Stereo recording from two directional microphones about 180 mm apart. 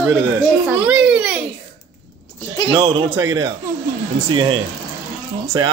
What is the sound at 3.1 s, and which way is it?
Speech, 15° right (ahead or behind).